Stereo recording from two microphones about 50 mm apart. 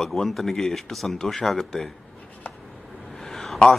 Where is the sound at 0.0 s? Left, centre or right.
Centre.